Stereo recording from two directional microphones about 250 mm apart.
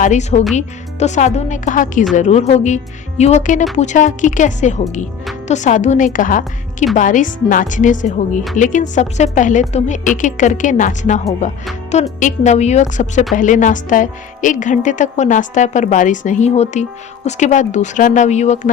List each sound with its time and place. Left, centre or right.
0.0 s a woman's voice: left
12.2 s a woman's voice: left